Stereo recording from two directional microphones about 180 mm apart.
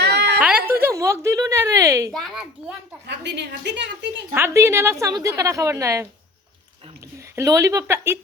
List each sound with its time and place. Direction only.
0.0 s a sound: 70° right (ahead or behind)
0.8 s speech: 15° right (ahead or behind)
2.1 s a child's voice: centre (ahead or behind)
3.1 s a woman's voice: 75° right (ahead or behind)
4.4 s a woman's voice: 15° right (ahead or behind)
7.3 s a woman's voice: 20° right (ahead or behind)